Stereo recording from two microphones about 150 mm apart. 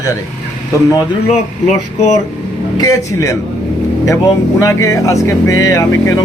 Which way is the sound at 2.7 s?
25° left (ahead or behind).